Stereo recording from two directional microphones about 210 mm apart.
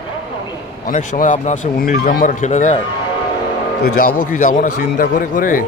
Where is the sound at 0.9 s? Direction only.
35° left (ahead or behind).